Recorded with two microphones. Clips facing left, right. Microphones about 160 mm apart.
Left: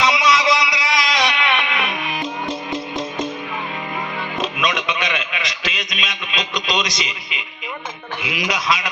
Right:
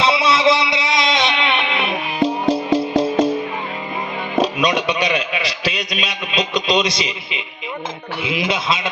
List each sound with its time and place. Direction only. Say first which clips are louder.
0.0 s music: right 2 dB; 30° right (ahead or behind)
4.4 s a sound: right 6 dB; 35° right (ahead or behind)
8.2 s a man's voice: right 3 dB; 25° right (ahead or behind)